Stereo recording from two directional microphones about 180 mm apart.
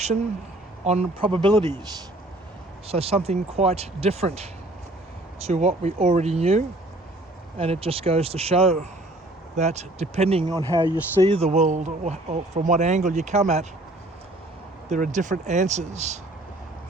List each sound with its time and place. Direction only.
0.9 s speech: 35° right (ahead or behind)
2.8 s speech: 35° right (ahead or behind)
10.5 s speech: 20° right (ahead or behind)
11.2 s speech: 30° right (ahead or behind)
14.8 s speech: 45° right (ahead or behind)